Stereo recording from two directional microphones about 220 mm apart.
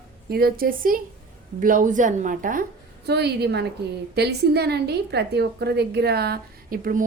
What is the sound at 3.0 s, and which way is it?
A woman's voice, 50° right (ahead or behind).